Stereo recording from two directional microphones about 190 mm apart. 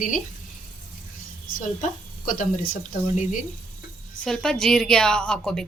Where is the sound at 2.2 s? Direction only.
45° left (ahead or behind).